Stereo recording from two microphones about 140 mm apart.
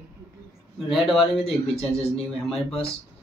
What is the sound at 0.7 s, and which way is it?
Speech, centre (ahead or behind).